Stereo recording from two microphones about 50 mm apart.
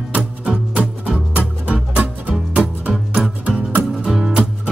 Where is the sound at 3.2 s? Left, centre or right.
Centre.